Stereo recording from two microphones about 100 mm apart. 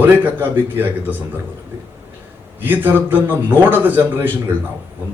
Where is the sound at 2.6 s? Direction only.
20° right (ahead or behind).